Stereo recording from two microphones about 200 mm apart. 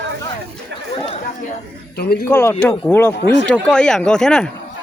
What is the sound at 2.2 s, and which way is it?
Speech, 10° left (ahead or behind).